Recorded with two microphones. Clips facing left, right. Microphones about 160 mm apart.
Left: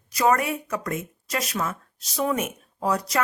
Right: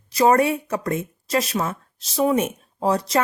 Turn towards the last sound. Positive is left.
turn(degrees=-30)  # may be behind; listen again after turning